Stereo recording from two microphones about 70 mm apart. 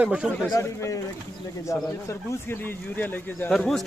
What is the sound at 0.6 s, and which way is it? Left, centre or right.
Speech, left.